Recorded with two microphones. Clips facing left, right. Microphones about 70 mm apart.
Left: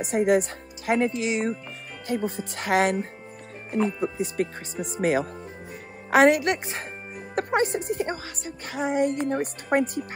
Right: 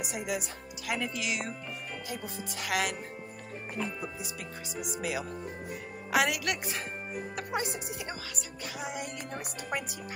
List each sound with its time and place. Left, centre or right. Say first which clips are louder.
0.0 s speech: left 13 dB; left
2.0 s speech: left 15 dB; left
2.7 s speech: left 10 dB; left
3.7 s speech: left 12 dB; left
7.3 s speech: left 12 dB; left